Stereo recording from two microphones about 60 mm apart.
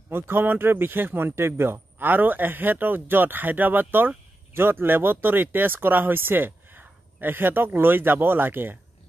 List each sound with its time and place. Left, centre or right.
0.1 s speech: right